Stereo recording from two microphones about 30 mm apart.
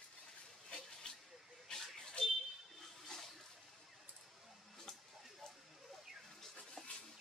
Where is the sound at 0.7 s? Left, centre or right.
Left.